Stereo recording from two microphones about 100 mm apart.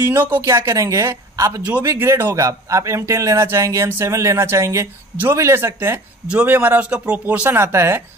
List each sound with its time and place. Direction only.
0.3 s speech: 30° right (ahead or behind)
2.0 s speech: 25° right (ahead or behind)
6.2 s speech: 15° right (ahead or behind)